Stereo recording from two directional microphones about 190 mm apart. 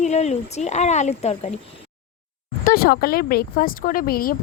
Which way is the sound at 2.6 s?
50° left (ahead or behind).